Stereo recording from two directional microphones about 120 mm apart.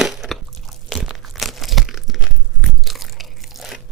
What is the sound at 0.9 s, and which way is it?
Crumpling, centre (ahead or behind).